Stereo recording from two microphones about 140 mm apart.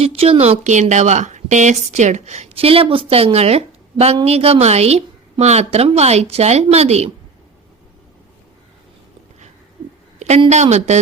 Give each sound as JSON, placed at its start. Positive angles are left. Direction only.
{"t": 0.0, "sound": "a woman's voice", "side_deg": -45}
{"t": 10.2, "sound": "a sound", "side_deg": -55}
{"t": 10.5, "sound": "speech", "side_deg": -55}